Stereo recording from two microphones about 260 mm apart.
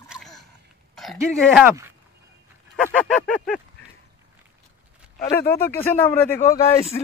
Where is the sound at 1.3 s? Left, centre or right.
Centre.